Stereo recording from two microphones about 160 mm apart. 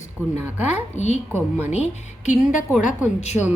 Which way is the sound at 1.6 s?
45° left (ahead or behind).